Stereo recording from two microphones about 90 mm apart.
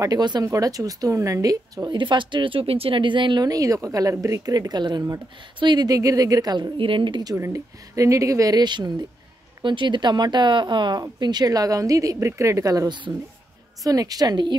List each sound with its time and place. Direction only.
0.0 s speech: 50° right (ahead or behind)
0.5 s a woman's voice: 40° right (ahead or behind)
1.9 s speech: 65° right (ahead or behind)
3.4 s speech: 40° right (ahead or behind)
6.8 s speech: 70° right (ahead or behind)
7.3 s a woman's voice: 35° right (ahead or behind); by 14.6 s 55° right (ahead or behind)